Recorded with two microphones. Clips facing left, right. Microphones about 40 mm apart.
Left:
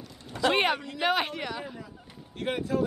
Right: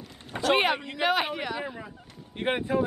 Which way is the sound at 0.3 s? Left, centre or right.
Right.